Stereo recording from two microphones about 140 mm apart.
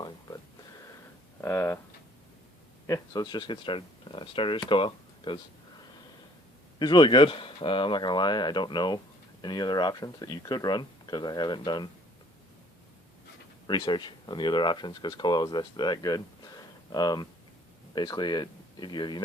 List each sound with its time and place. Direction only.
1.4 s a sound: 15° left (ahead or behind)
3.1 s speech: 30° left (ahead or behind)
6.7 s speech: 30° left (ahead or behind)
13.7 s speech: 35° left (ahead or behind)